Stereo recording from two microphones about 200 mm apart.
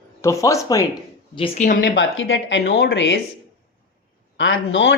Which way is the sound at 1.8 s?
65° left (ahead or behind).